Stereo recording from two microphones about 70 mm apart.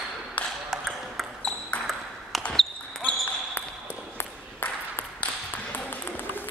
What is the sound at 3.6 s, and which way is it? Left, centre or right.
Ping, left.